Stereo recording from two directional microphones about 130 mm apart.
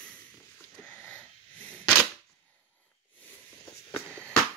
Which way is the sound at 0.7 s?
10° left (ahead or behind).